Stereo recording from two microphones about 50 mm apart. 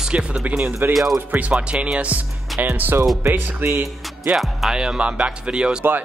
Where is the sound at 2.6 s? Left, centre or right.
Right.